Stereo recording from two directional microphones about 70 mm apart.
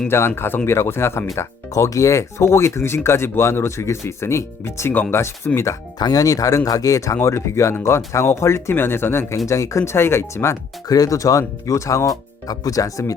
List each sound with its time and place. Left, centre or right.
0.1 s speech: left
1.4 s speech: left
5.5 s speech: left
6.0 s speech: left
7.2 s speech: left
9.5 s speech: left
10.8 s speech: left